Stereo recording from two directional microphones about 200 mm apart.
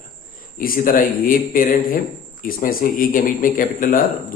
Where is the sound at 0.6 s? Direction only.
45° left (ahead or behind).